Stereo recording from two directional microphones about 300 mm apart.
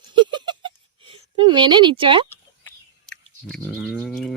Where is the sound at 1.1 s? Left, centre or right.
Centre.